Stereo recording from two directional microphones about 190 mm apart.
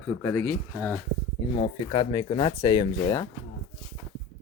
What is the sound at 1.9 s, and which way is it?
Speech, 25° left (ahead or behind).